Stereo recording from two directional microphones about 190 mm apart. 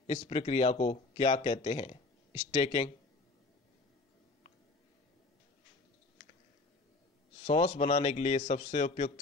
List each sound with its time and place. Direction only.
0.0 s speech: 30° left (ahead or behind)
7.4 s speech: 35° left (ahead or behind)